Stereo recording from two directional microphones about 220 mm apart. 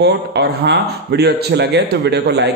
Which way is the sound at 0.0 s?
50° right (ahead or behind).